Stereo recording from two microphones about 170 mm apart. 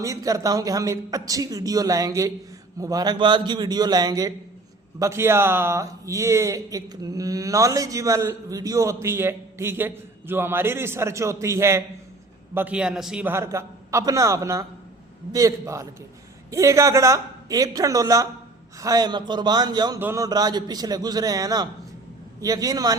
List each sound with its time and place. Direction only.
0.0 s a man's voice: 20° right (ahead or behind)